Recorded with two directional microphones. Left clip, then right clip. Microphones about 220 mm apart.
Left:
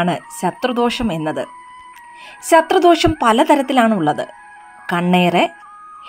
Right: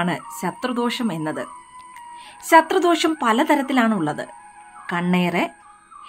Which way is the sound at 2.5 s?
20° left (ahead or behind).